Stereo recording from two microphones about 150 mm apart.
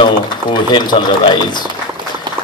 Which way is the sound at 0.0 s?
30° left (ahead or behind).